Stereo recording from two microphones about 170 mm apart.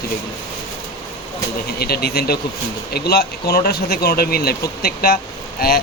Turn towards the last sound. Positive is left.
turn(degrees=60)  # may be behind; listen again after turning